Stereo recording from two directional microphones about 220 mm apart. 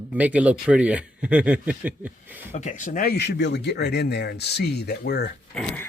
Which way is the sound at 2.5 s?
30° left (ahead or behind).